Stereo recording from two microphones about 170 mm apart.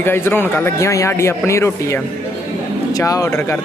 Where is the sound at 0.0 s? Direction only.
15° left (ahead or behind).